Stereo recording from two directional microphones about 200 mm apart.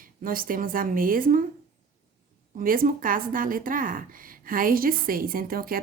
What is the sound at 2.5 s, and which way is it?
A woman's voice, 45° right (ahead or behind).